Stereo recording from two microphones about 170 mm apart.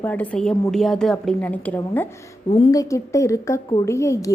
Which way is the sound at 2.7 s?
20° left (ahead or behind).